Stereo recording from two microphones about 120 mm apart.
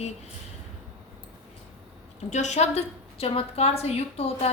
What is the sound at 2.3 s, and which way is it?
A woman's voice, 75° left (ahead or behind).